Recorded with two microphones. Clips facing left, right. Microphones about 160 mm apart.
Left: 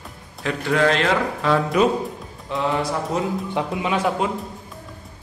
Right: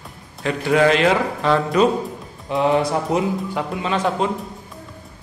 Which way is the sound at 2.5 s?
15° right (ahead or behind).